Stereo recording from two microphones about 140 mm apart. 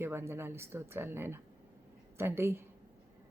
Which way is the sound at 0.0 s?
15° right (ahead or behind).